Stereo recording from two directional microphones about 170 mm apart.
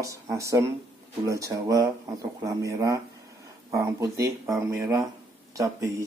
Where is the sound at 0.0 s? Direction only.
20° right (ahead or behind).